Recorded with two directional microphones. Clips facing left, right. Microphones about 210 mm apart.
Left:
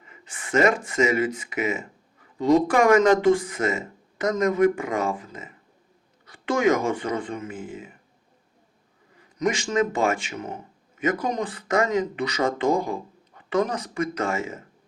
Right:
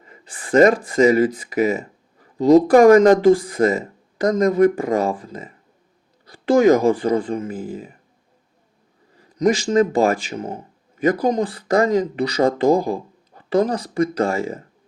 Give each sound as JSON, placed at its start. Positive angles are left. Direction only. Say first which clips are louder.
{"t": 0.0, "sound": "speech", "louder": "right 3 dB", "side_deg": -35}
{"t": 9.1, "sound": "speech", "louder": "right 7 dB", "side_deg": -35}